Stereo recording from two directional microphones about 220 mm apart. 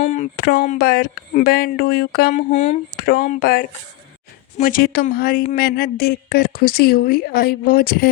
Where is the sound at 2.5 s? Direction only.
30° left (ahead or behind).